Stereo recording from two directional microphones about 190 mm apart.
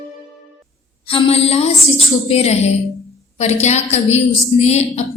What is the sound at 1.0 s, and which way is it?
Mantra, 30° left (ahead or behind).